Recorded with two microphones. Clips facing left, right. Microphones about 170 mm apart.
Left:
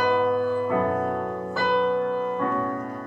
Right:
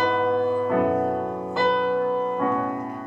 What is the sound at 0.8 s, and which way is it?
Music, 10° right (ahead or behind).